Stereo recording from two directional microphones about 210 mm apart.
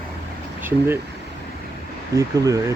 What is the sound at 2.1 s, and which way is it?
Speech, 15° right (ahead or behind).